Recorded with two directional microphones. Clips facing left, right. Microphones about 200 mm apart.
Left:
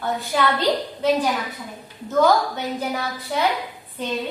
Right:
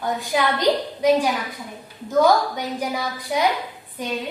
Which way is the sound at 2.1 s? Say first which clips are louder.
Right 1 dB; 10° right (ahead or behind).